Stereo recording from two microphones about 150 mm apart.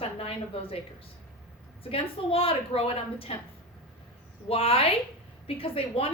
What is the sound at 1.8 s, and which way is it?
A woman's voice, 40° left (ahead or behind).